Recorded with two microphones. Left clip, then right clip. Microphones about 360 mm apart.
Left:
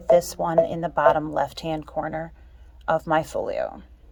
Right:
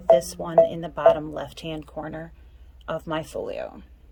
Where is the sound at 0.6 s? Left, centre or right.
Centre.